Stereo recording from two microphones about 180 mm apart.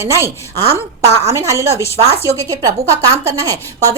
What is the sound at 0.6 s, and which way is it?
Speech, 35° right (ahead or behind).